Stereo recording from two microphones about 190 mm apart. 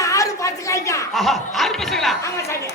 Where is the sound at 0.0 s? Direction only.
15° left (ahead or behind).